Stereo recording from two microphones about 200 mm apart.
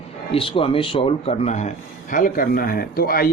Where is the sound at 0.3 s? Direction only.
25° left (ahead or behind).